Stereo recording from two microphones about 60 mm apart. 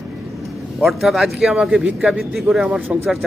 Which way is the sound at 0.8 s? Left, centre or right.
Centre.